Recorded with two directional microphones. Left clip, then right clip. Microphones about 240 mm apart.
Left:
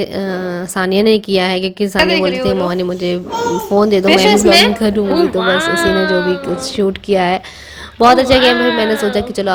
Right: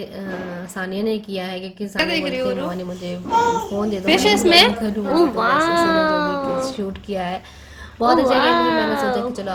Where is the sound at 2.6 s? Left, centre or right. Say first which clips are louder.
Left 11 dB; left.